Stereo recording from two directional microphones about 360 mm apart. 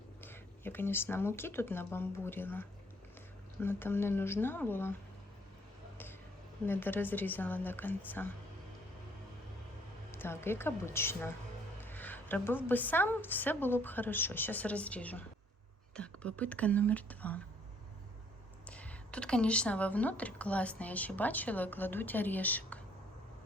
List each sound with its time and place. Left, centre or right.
0.2 s speech: centre
6.7 s speech: centre
10.1 s a woman's voice: centre
18.7 s speech: centre